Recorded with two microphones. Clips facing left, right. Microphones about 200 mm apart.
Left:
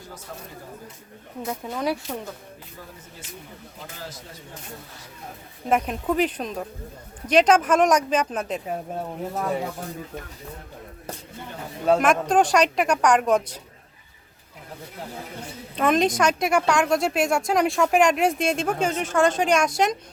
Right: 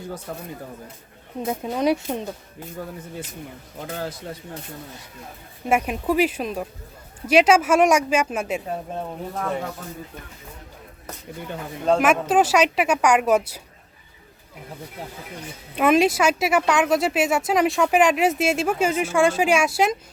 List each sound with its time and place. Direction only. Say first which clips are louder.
1.5 s speech: right 5 dB; 25° right (ahead or behind)
3.8 s speech: right 9 dB; 60° right (ahead or behind)
5.6 s speech: right 1 dB; 10° right (ahead or behind)
8.6 s speech: even; 10° left (ahead or behind)
11.9 s speech: right 2 dB; 5° right (ahead or behind)
15.7 s speech: right 3 dB; 10° right (ahead or behind)